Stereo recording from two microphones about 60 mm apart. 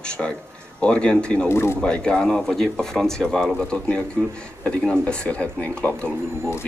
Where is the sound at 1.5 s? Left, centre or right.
Left.